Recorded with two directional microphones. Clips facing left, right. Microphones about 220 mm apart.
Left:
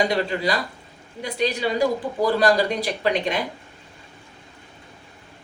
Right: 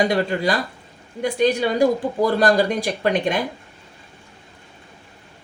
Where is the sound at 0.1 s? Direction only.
50° right (ahead or behind).